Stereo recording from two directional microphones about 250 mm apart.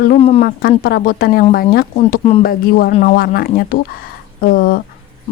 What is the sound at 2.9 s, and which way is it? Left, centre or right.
Speech, left.